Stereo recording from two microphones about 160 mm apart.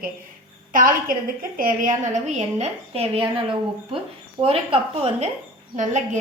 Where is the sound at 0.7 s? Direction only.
60° right (ahead or behind); by 5.3 s 40° right (ahead or behind).